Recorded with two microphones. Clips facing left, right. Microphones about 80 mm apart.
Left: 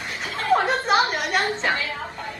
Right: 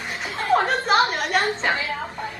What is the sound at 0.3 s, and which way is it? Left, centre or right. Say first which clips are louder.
Chuckle: even; centre.